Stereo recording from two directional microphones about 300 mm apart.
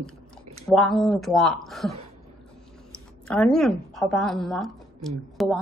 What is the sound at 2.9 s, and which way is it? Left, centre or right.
A woman's voice, centre.